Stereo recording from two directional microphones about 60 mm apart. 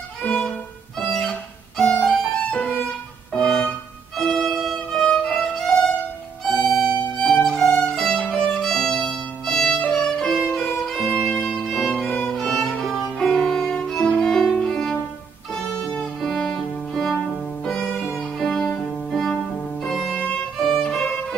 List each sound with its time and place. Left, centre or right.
0.2 s violin: centre
0.9 s music: centre
2.0 s violin: centre
3.3 s music: centre
4.2 s violin: centre
6.4 s music: centre
7.8 s violin: centre
15.5 s music: centre
19.9 s music: centre